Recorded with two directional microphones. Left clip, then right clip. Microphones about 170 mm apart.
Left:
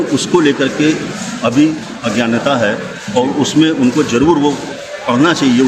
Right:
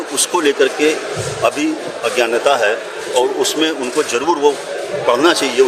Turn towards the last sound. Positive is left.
turn(degrees=-45)  # may be behind; listen again after turning